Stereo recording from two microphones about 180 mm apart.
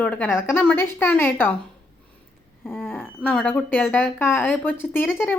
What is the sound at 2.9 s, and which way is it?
Speech, 10° left (ahead or behind).